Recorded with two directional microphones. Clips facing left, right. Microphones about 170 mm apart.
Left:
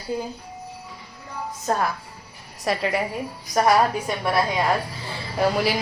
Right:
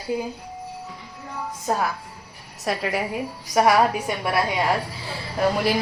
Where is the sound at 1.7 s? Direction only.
5° right (ahead or behind).